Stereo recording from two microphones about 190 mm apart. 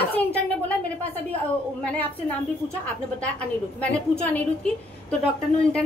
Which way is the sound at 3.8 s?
10° left (ahead or behind).